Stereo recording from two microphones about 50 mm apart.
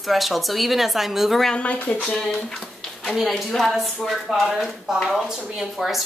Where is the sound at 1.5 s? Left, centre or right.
Left.